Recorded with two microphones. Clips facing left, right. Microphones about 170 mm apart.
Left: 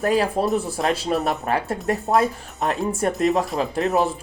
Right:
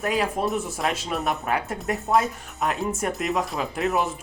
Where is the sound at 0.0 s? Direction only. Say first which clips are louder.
Left 4 dB; 35° left (ahead or behind).